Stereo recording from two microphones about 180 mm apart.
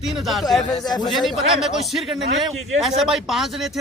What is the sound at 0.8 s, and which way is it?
Speech, 25° left (ahead or behind).